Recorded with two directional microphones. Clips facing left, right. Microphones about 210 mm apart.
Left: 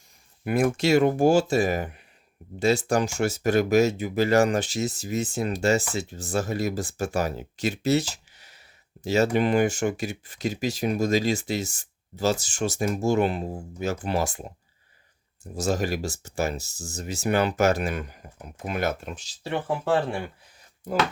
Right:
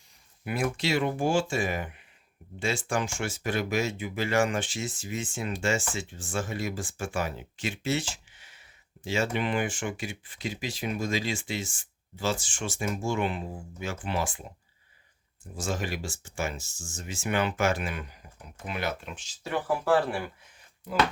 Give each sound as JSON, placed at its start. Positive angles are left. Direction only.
{"t": 0.4, "sound": "speech", "side_deg": 50}
{"t": 15.5, "sound": "speech", "side_deg": 40}
{"t": 19.5, "sound": "speech", "side_deg": 25}